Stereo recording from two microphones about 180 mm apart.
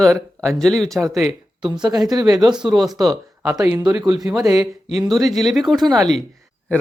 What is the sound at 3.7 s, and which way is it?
Speech, 20° right (ahead or behind).